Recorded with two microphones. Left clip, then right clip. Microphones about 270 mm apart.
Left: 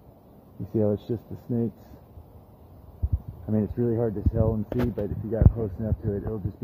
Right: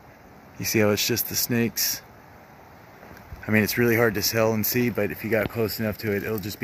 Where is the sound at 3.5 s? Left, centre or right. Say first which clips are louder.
Right 6 dB; right.